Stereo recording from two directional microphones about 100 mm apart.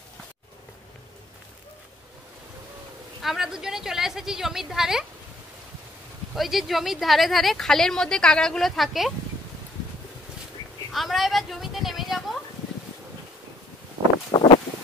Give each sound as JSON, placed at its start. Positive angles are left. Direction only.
{"t": 3.2, "sound": "speech", "side_deg": 0}
{"t": 6.3, "sound": "speech", "side_deg": 0}
{"t": 10.9, "sound": "a woman's voice", "side_deg": 0}
{"t": 14.3, "sound": "a sound", "side_deg": 45}